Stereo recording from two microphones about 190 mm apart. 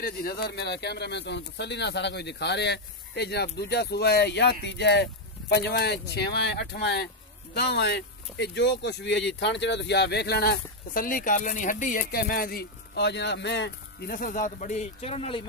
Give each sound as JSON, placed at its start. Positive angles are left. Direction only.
{"t": 0.0, "sound": "speech", "side_deg": 55}